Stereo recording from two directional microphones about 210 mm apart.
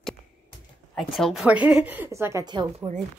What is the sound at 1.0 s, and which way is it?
A woman's voice, centre (ahead or behind).